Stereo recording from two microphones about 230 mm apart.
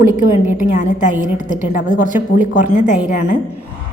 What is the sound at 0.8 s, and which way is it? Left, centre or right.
A woman's voice, left.